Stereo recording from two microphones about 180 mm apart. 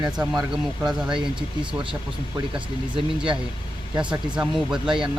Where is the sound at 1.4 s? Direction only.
30° right (ahead or behind).